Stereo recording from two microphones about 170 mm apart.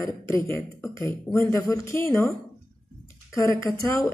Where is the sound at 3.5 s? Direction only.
15° left (ahead or behind).